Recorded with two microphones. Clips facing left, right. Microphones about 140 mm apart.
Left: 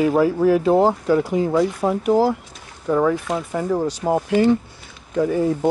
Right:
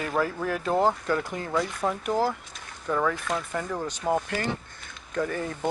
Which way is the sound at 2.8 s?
20° left (ahead or behind).